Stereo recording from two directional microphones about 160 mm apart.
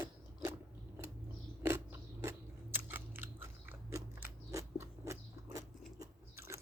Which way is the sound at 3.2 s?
10° right (ahead or behind).